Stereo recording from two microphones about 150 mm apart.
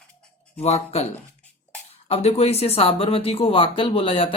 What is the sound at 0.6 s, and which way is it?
Speech, 45° left (ahead or behind).